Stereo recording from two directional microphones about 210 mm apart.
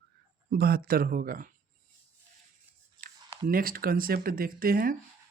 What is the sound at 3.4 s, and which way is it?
Speech, 45° right (ahead or behind).